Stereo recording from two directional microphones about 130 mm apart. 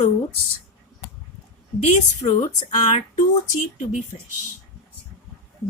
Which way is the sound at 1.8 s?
60° left (ahead or behind).